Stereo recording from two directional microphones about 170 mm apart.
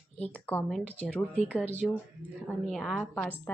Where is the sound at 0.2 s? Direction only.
10° left (ahead or behind).